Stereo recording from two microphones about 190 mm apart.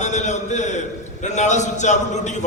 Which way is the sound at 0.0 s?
40° left (ahead or behind).